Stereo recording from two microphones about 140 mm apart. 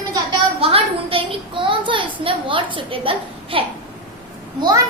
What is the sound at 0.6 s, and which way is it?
A woman's voice, 40° right (ahead or behind).